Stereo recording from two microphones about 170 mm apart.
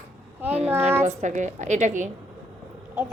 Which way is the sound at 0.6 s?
15° right (ahead or behind).